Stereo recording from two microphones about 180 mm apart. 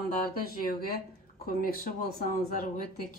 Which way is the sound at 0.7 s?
55° left (ahead or behind).